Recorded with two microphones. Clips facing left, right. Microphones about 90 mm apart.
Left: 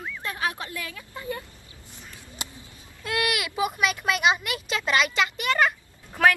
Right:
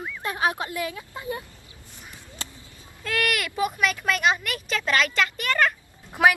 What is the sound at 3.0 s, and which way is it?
Speech, 15° left (ahead or behind).